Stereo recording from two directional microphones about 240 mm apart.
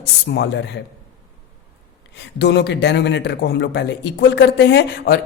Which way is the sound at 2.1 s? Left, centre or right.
Left.